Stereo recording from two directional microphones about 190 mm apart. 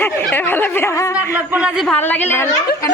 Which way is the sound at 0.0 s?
10° left (ahead or behind).